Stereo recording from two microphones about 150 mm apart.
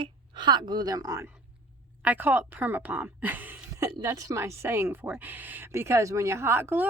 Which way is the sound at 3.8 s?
25° right (ahead or behind).